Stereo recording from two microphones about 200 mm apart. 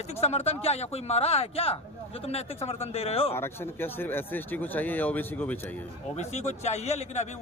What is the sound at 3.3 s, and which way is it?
Speech, 10° left (ahead or behind).